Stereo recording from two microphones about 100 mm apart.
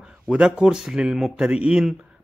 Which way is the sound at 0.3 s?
10° right (ahead or behind).